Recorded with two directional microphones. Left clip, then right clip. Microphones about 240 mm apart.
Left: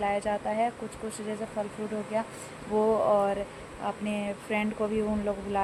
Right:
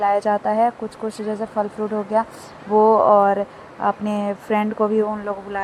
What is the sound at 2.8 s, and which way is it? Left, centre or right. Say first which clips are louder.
Speech: right 11 dB; centre.